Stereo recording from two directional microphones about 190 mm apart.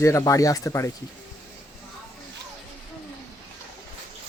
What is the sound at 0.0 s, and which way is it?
Speech, 15° left (ahead or behind).